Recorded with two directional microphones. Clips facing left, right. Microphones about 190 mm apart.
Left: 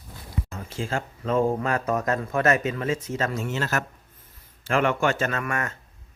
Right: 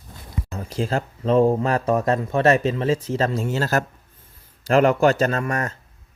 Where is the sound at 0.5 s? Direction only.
40° right (ahead or behind).